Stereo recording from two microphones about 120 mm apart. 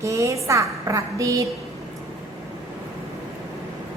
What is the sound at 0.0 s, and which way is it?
A woman's voice, 25° right (ahead or behind).